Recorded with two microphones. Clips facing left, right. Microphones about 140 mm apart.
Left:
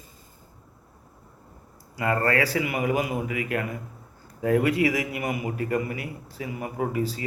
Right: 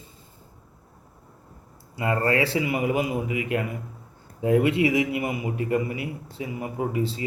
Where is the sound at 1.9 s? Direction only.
25° right (ahead or behind).